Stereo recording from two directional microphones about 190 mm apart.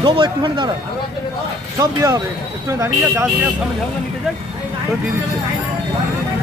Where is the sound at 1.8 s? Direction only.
15° right (ahead or behind).